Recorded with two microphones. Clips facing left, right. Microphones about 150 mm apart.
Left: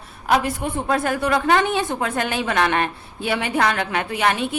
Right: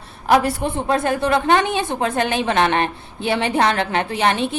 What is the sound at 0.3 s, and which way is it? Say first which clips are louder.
Speech: right 4 dB; 35° right (ahead or behind).